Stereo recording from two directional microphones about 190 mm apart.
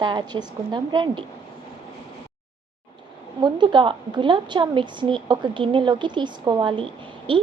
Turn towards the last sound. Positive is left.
turn(degrees=-25)  # may be behind; listen again after turning